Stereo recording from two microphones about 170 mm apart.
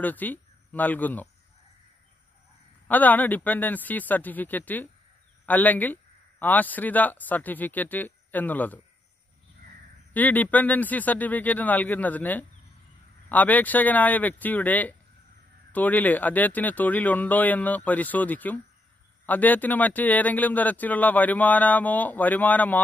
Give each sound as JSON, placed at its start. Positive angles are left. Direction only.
{"t": 0.0, "sound": "speech", "side_deg": 10}
{"t": 2.9, "sound": "speech", "side_deg": 10}
{"t": 10.1, "sound": "speech", "side_deg": 10}